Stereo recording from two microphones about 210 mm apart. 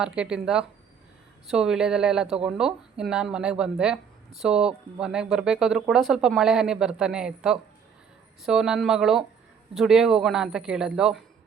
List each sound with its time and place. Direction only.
0.0 s speech: 5° right (ahead or behind)